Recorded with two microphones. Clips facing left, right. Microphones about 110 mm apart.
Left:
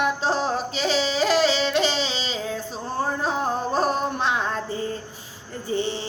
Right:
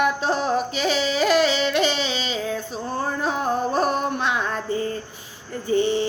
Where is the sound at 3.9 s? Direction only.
35° left (ahead or behind).